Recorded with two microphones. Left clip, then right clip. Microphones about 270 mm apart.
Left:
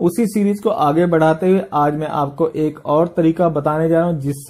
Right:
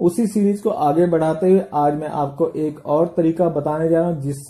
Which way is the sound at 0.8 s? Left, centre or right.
Left.